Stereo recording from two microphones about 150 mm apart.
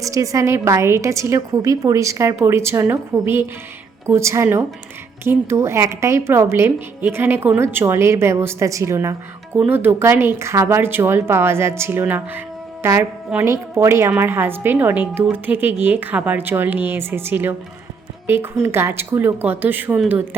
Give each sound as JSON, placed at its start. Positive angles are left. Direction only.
{"t": 0.0, "sound": "a woman's voice", "side_deg": -20}